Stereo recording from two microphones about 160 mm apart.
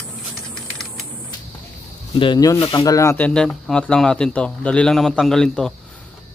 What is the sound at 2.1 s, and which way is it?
Speech, 30° left (ahead or behind).